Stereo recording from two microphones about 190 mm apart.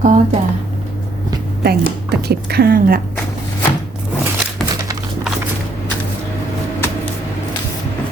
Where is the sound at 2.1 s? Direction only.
60° right (ahead or behind).